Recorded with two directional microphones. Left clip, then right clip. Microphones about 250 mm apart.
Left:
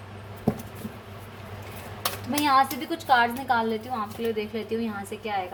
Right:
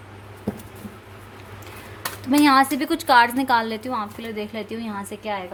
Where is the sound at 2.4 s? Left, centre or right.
Right.